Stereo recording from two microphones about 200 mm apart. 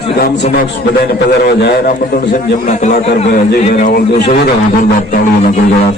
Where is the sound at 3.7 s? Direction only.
50° left (ahead or behind).